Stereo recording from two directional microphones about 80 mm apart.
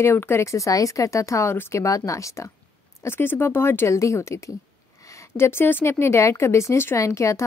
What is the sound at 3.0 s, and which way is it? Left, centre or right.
A woman's voice, left.